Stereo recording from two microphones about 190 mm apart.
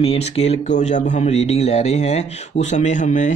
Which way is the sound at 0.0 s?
30° left (ahead or behind).